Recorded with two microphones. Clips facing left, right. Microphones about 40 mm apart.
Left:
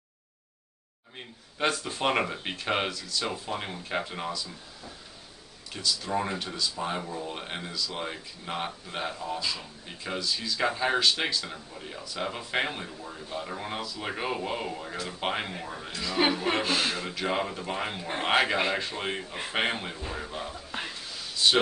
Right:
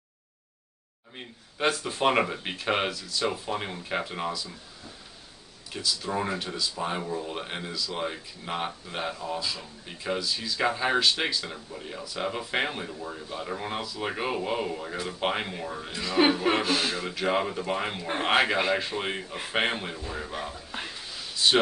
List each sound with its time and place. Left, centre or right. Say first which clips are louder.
1.1 s speech: right 1 dB; centre
5.7 s speech: even; centre
20.5 s a sound: left 1 dB; centre